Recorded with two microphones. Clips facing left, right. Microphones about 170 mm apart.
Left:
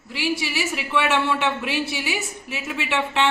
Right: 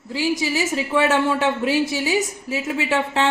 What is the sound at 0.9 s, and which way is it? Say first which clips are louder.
A woman's voice: right 3 dB; 40° right (ahead or behind).